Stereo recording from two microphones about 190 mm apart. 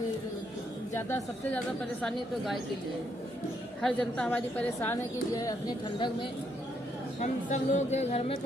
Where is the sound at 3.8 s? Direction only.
5° left (ahead or behind); by 6.3 s 25° left (ahead or behind).